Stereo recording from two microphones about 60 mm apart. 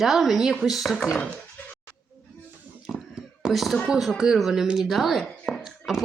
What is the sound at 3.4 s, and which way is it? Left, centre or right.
Speech, centre.